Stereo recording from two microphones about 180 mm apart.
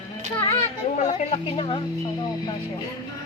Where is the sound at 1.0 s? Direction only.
35° left (ahead or behind).